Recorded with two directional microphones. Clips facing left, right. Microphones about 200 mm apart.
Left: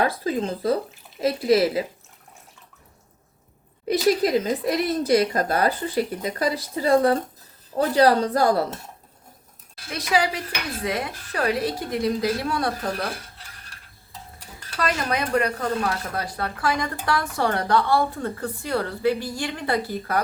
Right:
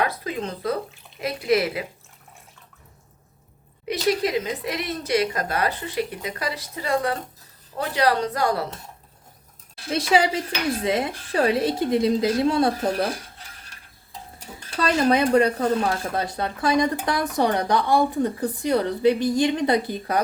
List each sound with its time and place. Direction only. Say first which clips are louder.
0.0 s speech: left 3 dB; 30° left (ahead or behind)
3.8 s speech: left 3 dB; 40° left (ahead or behind)
9.9 s speech: right 3 dB; 25° right (ahead or behind)
14.8 s speech: right 6 dB; 30° right (ahead or behind)